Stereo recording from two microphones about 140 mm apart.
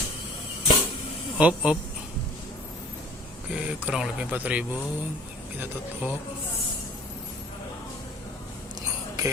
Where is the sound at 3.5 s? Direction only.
5° right (ahead or behind).